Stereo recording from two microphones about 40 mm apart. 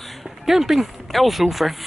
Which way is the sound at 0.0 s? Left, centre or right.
Centre.